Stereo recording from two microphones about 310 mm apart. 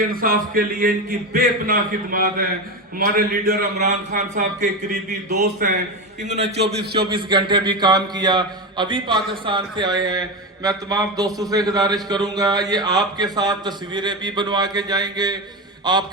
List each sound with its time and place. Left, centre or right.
0.0 s a man's voice: right
6.2 s a man's voice: right
6.7 s a man's voice: right
7.1 s a man's voice: centre
15.8 s mantra: centre